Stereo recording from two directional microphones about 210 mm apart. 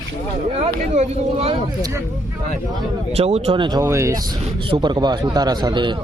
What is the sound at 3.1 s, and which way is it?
A man's voice, 30° right (ahead or behind).